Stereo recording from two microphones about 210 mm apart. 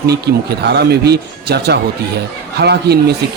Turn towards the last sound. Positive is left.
turn(degrees=-50)  # may be behind; listen again after turning